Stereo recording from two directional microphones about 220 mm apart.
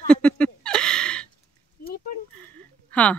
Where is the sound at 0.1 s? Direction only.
5° left (ahead or behind).